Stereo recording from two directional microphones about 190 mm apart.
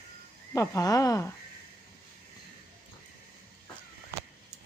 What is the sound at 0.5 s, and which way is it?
Speech, 15° left (ahead or behind).